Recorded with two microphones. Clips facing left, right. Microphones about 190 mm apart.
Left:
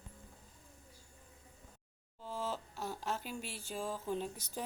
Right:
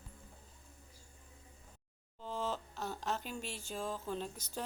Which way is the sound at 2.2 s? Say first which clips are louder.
Right 1 dB; 10° left (ahead or behind).